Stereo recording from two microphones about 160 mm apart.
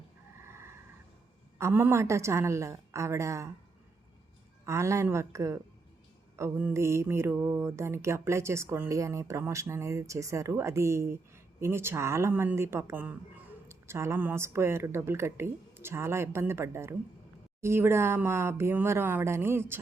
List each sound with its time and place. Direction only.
0.4 s a sound: 15° right (ahead or behind)
1.5 s mantra: 15° right (ahead or behind)
4.6 s mantra: 20° right (ahead or behind)